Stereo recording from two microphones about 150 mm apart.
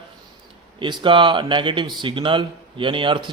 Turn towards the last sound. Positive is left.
turn(degrees=-35)  # may be behind; listen again after turning